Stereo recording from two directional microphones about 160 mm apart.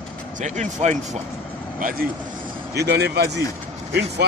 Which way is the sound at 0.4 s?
50° right (ahead or behind).